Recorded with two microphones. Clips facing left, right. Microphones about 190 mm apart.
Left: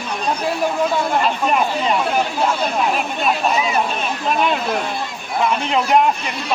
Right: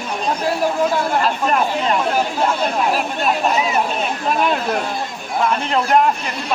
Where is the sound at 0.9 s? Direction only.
Centre (ahead or behind).